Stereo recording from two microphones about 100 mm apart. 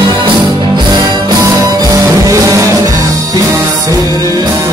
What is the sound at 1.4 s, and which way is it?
Music, 40° right (ahead or behind).